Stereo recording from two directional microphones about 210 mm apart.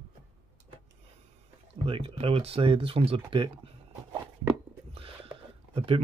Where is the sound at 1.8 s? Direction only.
25° right (ahead or behind).